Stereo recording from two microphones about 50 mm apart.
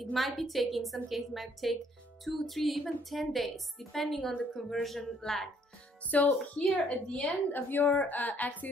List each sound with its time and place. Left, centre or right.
0.0 s a woman's voice: centre
4.2 s a woman's voice: left
4.6 s a woman's voice: centre
6.0 s a woman's voice: left
6.9 s a woman's voice: left
7.2 s a woman's voice: left